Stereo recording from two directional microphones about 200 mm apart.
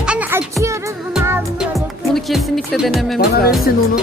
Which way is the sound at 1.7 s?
Centre (ahead or behind).